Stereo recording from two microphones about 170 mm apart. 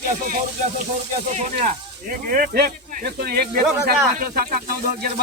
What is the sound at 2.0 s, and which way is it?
Speech, 60° right (ahead or behind).